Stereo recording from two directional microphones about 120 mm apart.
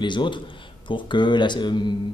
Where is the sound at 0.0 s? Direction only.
40° left (ahead or behind).